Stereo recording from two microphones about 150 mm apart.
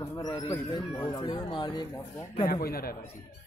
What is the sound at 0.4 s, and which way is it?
Speech, 30° left (ahead or behind).